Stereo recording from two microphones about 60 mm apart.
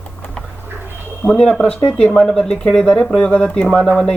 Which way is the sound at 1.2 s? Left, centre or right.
Centre.